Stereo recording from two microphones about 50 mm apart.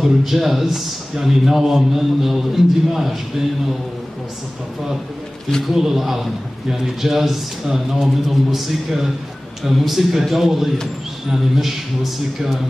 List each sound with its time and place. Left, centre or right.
0.0 s a man's voice: centre
5.7 s a man's voice: centre